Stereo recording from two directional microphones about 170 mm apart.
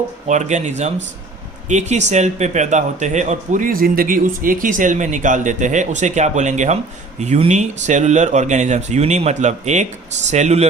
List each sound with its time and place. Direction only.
0.3 s a man's voice: 45° right (ahead or behind)